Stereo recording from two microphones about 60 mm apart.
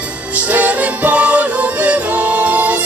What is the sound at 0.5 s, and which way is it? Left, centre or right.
Music, right.